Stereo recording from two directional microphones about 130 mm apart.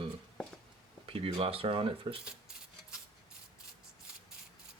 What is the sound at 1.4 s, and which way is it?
Speech, 45° right (ahead or behind).